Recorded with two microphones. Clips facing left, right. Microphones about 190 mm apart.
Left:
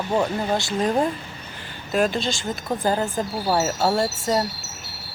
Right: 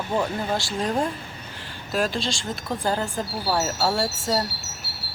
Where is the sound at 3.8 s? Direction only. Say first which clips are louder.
Left 3 dB; 15° left (ahead or behind).